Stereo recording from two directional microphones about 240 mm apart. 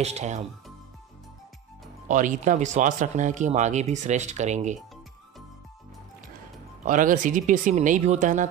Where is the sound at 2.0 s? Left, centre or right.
Right.